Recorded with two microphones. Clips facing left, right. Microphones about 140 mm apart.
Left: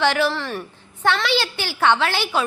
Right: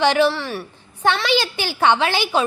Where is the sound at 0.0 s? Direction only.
20° right (ahead or behind).